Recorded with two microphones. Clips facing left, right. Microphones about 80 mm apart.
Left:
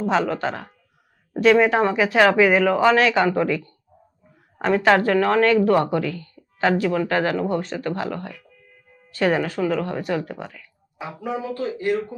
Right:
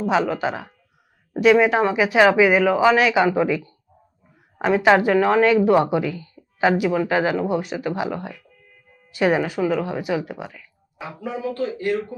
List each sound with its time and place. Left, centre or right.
0.0 s a woman's voice: centre
11.2 s speech: centre